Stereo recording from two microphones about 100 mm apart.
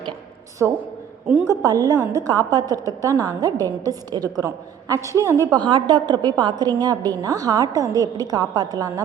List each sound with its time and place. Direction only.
0.6 s a woman's voice: 20° right (ahead or behind)
1.5 s a woman's voice: 40° right (ahead or behind)
5.5 s a woman's voice: 50° right (ahead or behind)